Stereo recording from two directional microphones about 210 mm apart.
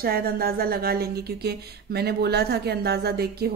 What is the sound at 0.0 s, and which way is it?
A woman's voice, 45° right (ahead or behind).